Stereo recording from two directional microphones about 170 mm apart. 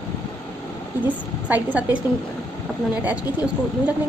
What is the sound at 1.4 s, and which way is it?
Speech, 10° right (ahead or behind).